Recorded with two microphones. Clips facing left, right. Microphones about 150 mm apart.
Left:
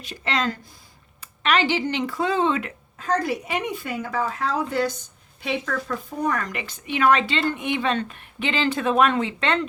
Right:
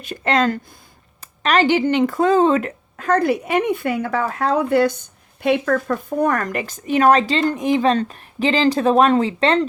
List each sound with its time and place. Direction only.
0.0 s speech: 50° right (ahead or behind)
3.0 s a woman's voice: 60° right (ahead or behind); by 9.6 s 35° right (ahead or behind)